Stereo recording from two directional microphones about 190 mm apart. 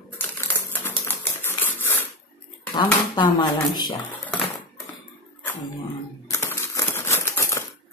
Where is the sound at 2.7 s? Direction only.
25° left (ahead or behind).